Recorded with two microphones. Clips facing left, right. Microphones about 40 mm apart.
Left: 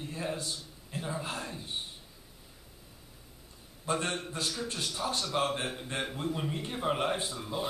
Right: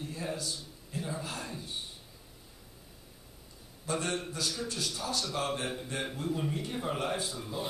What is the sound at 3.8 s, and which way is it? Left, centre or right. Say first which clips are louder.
A man's voice: left 1 dB; left.